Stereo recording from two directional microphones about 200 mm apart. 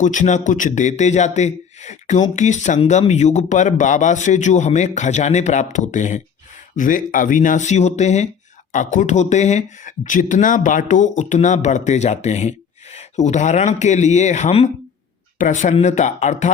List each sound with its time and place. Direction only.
0.0 s a man's voice: 40° left (ahead or behind)